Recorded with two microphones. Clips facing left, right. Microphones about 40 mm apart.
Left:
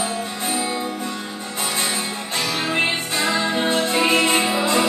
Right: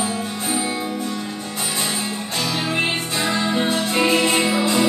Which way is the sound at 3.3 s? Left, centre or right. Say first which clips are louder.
Even; centre.